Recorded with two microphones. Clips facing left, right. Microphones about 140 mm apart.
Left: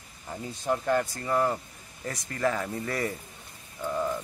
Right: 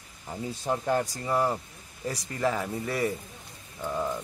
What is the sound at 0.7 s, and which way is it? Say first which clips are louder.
A man's voice: left 1 dB; 15° right (ahead or behind).